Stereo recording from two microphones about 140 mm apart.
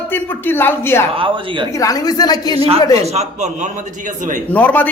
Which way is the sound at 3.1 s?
50° right (ahead or behind).